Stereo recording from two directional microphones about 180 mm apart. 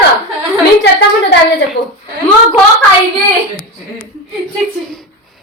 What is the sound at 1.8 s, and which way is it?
Speech, 65° left (ahead or behind).